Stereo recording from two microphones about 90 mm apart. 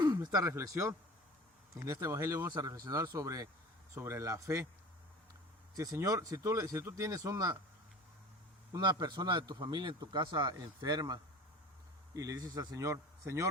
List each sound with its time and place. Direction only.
0.0 s a sound: 50° right (ahead or behind)
0.3 s speech: 35° right (ahead or behind)
2.5 s speech: 45° right (ahead or behind)
5.7 s speech: 40° right (ahead or behind)
8.8 s speech: 55° right (ahead or behind); by 13.5 s 35° right (ahead or behind)